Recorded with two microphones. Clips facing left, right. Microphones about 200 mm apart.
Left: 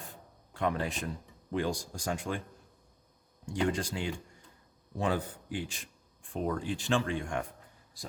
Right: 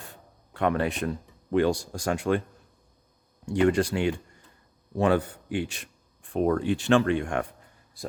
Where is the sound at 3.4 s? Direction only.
65° right (ahead or behind).